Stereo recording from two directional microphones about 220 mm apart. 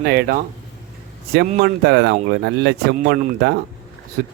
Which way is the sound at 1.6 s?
50° right (ahead or behind).